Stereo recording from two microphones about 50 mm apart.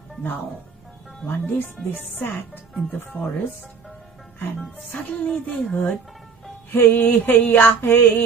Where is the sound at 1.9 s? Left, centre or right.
Left.